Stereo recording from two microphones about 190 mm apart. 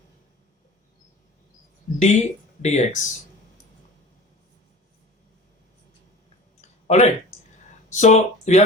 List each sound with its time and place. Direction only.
2.0 s speech: 35° left (ahead or behind)
6.6 s a sound: 35° left (ahead or behind)
7.9 s speech: 35° left (ahead or behind)